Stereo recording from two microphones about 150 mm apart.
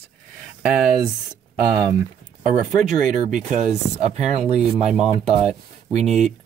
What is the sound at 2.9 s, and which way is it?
Speech, 5° right (ahead or behind).